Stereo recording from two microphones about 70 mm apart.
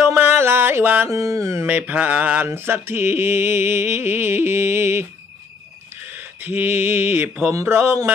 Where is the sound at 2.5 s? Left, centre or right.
Right.